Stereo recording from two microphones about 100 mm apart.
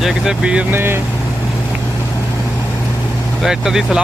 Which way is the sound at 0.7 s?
20° right (ahead or behind).